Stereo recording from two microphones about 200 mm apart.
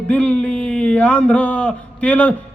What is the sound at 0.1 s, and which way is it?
Speech, 5° left (ahead or behind).